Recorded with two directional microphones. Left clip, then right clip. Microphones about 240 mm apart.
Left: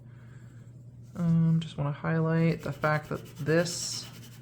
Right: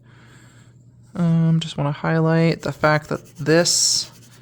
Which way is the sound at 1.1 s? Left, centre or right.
Right.